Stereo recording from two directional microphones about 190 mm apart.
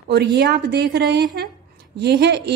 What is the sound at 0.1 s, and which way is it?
Speech, 60° right (ahead or behind).